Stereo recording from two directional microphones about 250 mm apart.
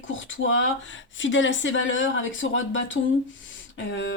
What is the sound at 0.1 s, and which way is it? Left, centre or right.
A woman's voice, left.